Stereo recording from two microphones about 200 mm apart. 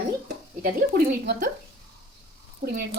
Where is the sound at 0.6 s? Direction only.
50° right (ahead or behind).